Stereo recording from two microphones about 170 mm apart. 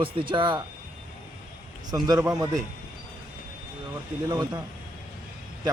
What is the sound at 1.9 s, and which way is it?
Speech, 20° right (ahead or behind).